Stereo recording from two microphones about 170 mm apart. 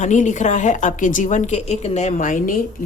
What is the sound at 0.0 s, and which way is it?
A woman's voice, 45° left (ahead or behind).